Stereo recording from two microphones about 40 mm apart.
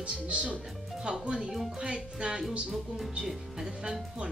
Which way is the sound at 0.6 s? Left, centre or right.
Centre.